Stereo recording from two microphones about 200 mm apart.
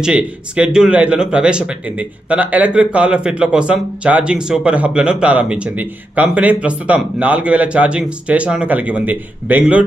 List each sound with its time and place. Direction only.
0.0 s speech: 5° right (ahead or behind)